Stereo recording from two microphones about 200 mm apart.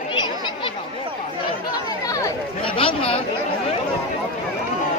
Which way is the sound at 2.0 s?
15° left (ahead or behind).